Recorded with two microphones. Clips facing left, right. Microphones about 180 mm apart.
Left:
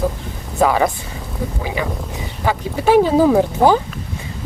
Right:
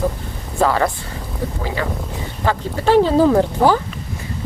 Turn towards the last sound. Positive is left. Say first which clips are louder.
# left 1 dB
turn(degrees=15)  # may be behind; listen again after turning